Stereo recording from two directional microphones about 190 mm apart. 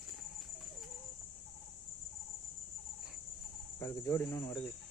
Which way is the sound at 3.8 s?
15° left (ahead or behind).